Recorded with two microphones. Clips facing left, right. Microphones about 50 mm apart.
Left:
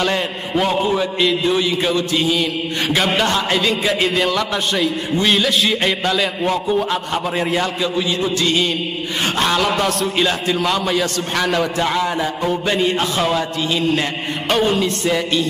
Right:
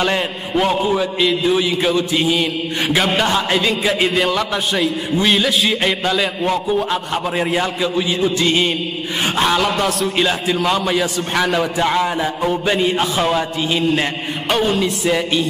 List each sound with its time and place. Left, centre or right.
0.0 s a man's voice: centre
2.0 s a man's voice: centre
3.1 s a man's voice: centre
8.4 s mantra: centre
9.4 s a man's voice: centre
14.5 s a man's voice: centre